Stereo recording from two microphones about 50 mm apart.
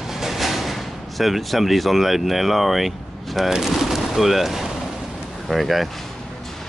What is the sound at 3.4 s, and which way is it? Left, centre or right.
Speech, centre.